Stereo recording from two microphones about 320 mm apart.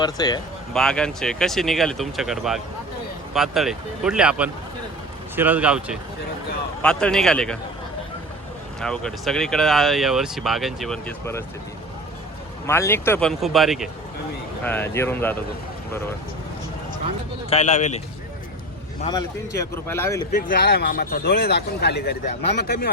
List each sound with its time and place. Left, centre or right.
0.0 s a man's voice: centre
0.7 s speech: centre
8.8 s speech: centre
12.6 s a man's voice: centre
17.5 s speech: left
19.0 s a man's voice: centre
20.3 s speech: left